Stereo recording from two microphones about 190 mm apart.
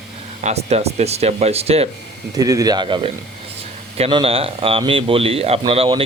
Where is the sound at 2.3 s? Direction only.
20° right (ahead or behind).